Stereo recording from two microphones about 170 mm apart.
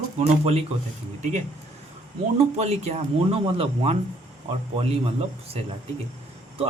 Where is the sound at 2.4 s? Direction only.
40° right (ahead or behind).